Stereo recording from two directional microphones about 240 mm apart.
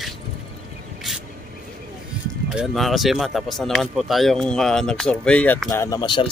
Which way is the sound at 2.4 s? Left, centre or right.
Centre.